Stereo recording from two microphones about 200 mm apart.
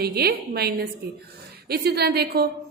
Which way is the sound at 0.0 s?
50° right (ahead or behind).